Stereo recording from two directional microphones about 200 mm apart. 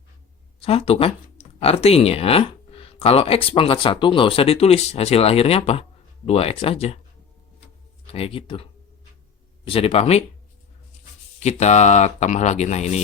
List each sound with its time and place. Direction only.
0.6 s speech: 30° left (ahead or behind)
8.0 s speech: 30° left (ahead or behind)
9.6 s speech: 30° left (ahead or behind)
11.3 s speech: 35° left (ahead or behind)